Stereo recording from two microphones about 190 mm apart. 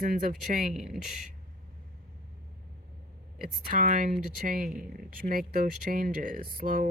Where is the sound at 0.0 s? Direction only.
45° right (ahead or behind).